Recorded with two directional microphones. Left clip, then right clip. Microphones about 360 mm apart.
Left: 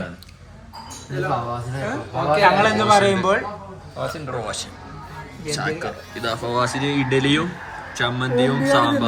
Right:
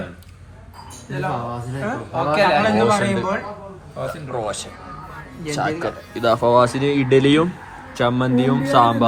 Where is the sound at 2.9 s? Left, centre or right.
Centre.